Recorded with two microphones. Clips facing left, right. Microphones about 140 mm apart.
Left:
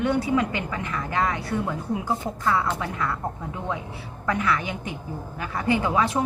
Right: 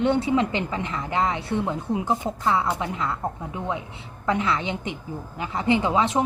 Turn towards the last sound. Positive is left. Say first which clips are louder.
# right 1 dB
turn(degrees=-20)  # may be behind; listen again after turning